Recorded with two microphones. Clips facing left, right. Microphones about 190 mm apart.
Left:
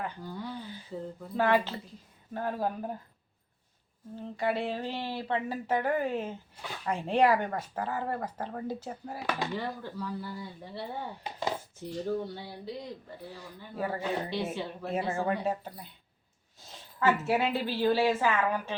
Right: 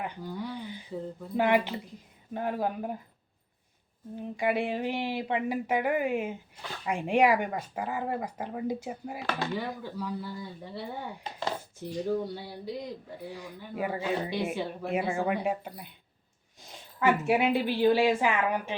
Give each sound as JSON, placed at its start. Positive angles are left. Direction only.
{"t": 0.0, "sound": "speech", "side_deg": -15}
{"t": 4.1, "sound": "speech", "side_deg": -15}
{"t": 11.2, "sound": "dishes", "side_deg": 15}
{"t": 11.8, "sound": "a woman's voice", "side_deg": -15}